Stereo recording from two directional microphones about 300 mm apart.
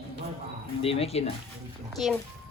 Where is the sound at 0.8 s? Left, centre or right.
Centre.